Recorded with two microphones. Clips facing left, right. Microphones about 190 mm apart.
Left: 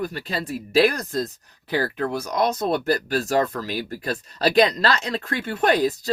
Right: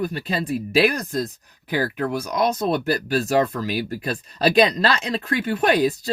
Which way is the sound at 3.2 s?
15° right (ahead or behind).